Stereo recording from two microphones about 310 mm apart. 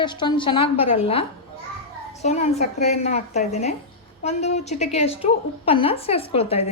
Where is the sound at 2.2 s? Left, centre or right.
Left.